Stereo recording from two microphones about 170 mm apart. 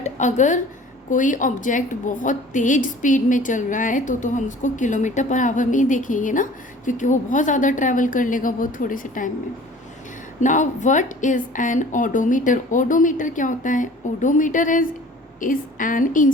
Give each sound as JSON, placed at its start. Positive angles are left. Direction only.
{"t": 0.0, "sound": "a woman's voice", "side_deg": 45}
{"t": 10.4, "sound": "a woman's voice", "side_deg": 45}